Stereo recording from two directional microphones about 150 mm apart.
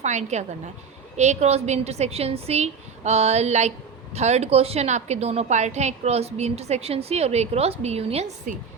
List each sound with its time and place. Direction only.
0.0 s a woman's voice: 50° right (ahead or behind)